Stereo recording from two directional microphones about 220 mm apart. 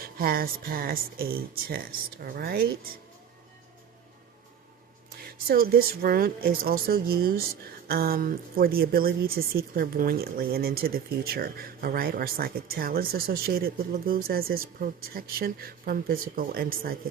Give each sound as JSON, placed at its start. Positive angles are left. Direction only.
{"t": 0.0, "sound": "speech", "side_deg": -40}
{"t": 5.5, "sound": "speech", "side_deg": -40}